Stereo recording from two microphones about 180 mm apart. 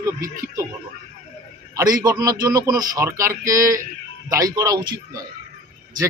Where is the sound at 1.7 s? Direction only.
20° right (ahead or behind).